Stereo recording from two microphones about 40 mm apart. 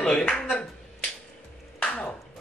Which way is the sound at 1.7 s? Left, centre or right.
Left.